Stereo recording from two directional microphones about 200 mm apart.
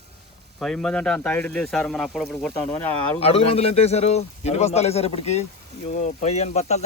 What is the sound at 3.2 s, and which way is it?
Speech, 30° left (ahead or behind).